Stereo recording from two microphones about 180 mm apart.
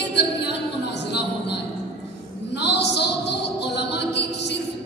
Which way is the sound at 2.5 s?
70° left (ahead or behind).